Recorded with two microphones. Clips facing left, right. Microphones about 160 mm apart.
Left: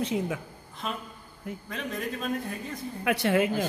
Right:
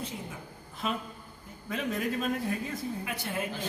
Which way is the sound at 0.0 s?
80° left.